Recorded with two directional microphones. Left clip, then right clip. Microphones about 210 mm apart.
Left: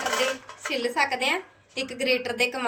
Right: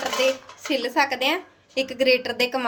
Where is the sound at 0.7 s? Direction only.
60° right (ahead or behind).